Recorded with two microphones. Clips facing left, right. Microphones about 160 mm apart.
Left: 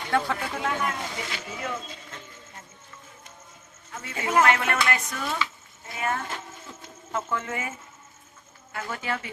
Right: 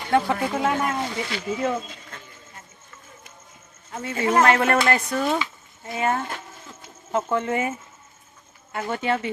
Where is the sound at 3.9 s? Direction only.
40° right (ahead or behind).